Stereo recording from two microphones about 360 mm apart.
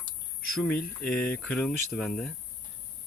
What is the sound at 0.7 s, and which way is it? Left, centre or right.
Speech, left.